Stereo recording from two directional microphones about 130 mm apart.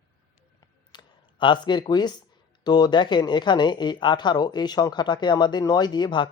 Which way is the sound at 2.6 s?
30° left (ahead or behind).